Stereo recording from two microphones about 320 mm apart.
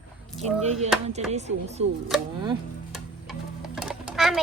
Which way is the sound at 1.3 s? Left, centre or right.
Right.